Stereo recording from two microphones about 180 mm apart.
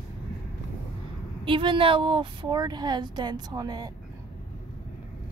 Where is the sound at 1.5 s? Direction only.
30° right (ahead or behind).